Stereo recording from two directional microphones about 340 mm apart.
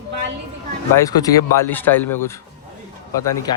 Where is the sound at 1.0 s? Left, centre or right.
Centre.